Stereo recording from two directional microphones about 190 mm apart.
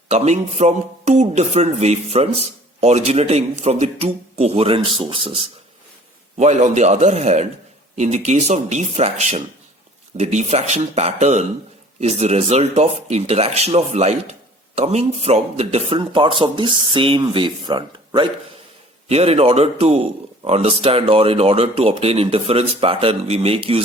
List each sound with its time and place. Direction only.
0.1 s speech: 35° right (ahead or behind)